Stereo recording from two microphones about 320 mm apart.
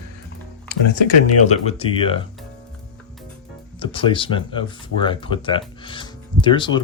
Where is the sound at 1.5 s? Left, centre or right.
Centre.